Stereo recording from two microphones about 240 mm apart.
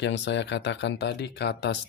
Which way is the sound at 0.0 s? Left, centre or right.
Left.